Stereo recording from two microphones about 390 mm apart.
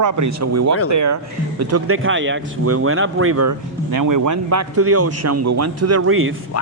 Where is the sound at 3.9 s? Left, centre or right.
Right.